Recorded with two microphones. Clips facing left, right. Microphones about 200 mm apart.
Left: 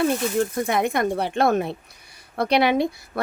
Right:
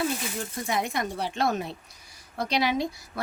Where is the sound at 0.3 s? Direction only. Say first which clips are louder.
Left 8 dB; 60° left (ahead or behind).